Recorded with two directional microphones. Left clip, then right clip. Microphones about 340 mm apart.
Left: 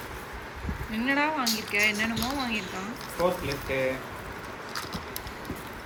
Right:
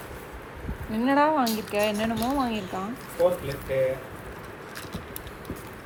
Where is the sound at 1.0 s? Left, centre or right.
Centre.